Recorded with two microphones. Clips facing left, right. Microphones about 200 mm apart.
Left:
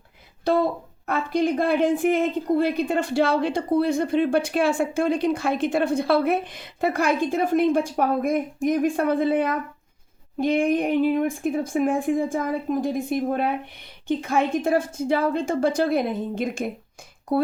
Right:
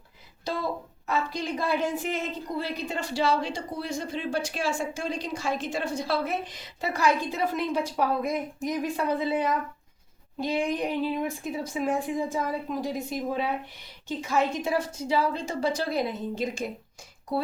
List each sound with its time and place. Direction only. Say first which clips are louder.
0.4 s speech: left 9 dB; 55° left (ahead or behind)